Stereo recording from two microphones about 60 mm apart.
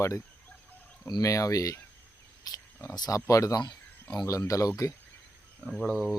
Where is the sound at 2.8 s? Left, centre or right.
Left.